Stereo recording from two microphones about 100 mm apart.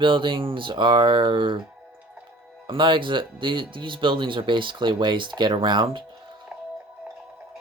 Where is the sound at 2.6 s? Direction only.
55° right (ahead or behind).